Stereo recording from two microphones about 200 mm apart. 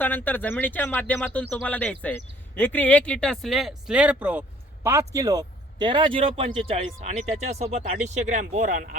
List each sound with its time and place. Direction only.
0.0 s speech: 10° left (ahead or behind); by 9.0 s 40° right (ahead or behind)